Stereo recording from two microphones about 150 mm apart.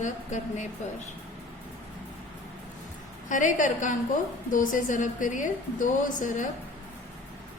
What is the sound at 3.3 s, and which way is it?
A woman's voice, 55° left (ahead or behind).